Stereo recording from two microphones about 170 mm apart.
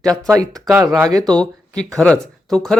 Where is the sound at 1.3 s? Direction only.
5° left (ahead or behind).